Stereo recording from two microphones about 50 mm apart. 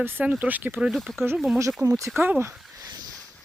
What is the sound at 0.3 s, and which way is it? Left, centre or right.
Speech, right.